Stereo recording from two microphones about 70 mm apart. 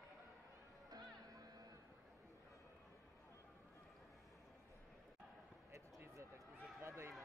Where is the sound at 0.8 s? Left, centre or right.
Right.